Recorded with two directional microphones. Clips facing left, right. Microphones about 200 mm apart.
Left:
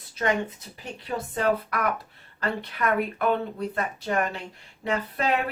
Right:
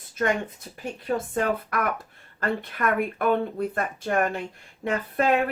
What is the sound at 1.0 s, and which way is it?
A woman's voice, 50° right (ahead or behind).